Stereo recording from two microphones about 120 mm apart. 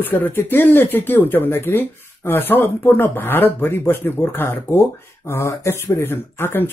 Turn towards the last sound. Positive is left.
turn(degrees=20)  # may be behind; listen again after turning